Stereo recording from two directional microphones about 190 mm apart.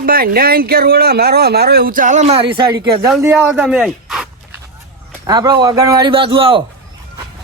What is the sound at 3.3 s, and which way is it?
Speech, centre (ahead or behind).